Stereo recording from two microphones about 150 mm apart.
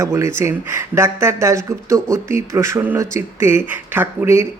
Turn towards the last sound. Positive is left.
turn(degrees=-15)  # may be behind; listen again after turning